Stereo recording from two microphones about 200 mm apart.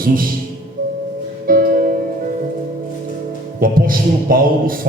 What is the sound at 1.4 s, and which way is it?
Music, 45° right (ahead or behind).